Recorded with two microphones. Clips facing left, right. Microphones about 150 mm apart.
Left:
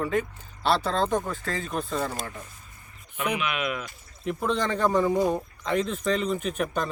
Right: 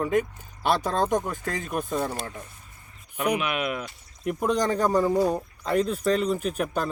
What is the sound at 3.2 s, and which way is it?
Speech, 40° right (ahead or behind).